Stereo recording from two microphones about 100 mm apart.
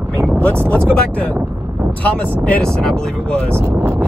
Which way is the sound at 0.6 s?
10° left (ahead or behind).